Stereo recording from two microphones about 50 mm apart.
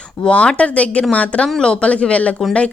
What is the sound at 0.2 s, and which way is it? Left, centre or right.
Speech, left.